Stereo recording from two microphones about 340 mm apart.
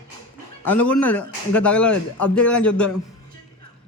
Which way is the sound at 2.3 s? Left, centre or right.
Centre.